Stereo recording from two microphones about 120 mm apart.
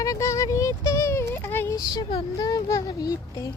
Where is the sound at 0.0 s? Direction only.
25° left (ahead or behind).